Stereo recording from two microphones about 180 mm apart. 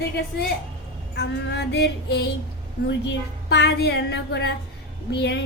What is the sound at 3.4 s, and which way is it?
Child singing, 65° left (ahead or behind).